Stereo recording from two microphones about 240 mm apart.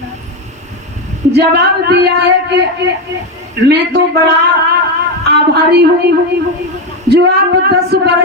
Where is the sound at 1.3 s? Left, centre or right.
Right.